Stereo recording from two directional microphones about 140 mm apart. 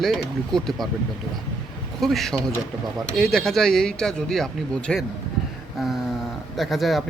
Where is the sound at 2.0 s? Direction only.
Centre (ahead or behind).